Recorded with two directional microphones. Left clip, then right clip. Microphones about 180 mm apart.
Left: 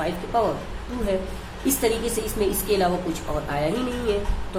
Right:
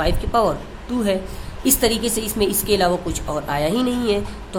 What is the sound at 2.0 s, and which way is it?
Speech, 45° right (ahead or behind).